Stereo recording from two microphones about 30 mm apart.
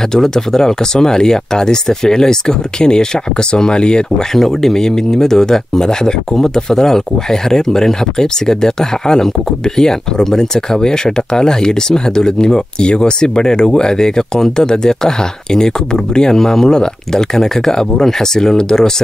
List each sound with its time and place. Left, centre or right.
0.1 s speech: centre
4.4 s speech: centre